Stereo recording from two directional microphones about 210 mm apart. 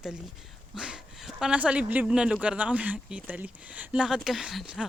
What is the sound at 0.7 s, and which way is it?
Speech, 5° right (ahead or behind).